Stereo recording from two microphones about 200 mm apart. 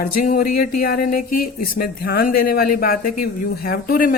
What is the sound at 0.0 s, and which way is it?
Speech, 45° left (ahead or behind).